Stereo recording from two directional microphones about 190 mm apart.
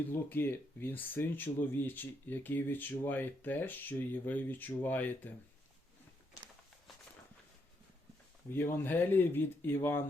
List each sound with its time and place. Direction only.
0.0 s speech: 10° left (ahead or behind)
8.5 s speech: 10° left (ahead or behind)